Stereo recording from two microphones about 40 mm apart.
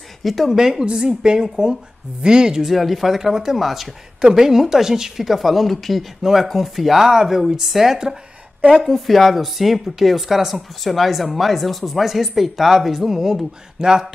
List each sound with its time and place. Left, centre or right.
0.2 s speech: centre
0.6 s a woman's voice: centre
2.7 s speech: centre
8.8 s speech: centre